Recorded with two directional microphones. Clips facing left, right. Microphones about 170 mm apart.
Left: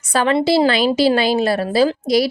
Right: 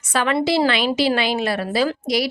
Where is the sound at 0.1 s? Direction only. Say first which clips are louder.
Left 4 dB; 35° left (ahead or behind).